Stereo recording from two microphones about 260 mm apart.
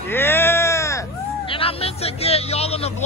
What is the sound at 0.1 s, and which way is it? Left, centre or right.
Speech, centre.